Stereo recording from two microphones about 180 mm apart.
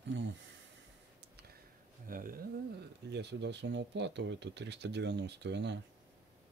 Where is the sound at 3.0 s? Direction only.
70° right (ahead or behind).